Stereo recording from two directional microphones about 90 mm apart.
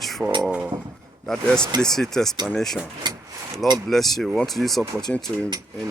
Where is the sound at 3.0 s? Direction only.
50° right (ahead or behind).